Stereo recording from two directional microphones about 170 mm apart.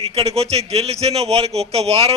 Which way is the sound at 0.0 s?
35° right (ahead or behind).